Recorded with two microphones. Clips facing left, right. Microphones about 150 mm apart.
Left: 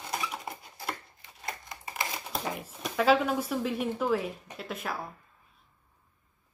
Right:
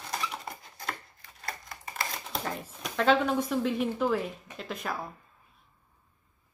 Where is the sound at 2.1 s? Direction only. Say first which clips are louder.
Even; 10° left (ahead or behind).